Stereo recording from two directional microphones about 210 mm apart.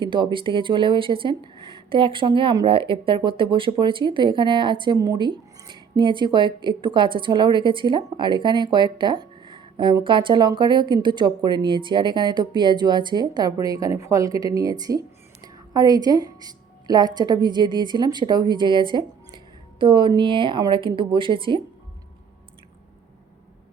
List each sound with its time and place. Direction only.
0.0 s a woman's voice: 20° right (ahead or behind)